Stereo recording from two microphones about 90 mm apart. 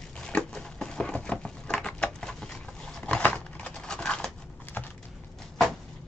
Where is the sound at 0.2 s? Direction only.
15° left (ahead or behind).